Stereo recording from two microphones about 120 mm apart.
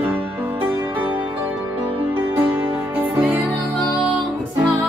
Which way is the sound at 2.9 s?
15° right (ahead or behind).